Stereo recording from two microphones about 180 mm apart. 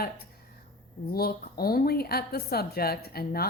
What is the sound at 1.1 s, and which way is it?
Speech, 60° left (ahead or behind).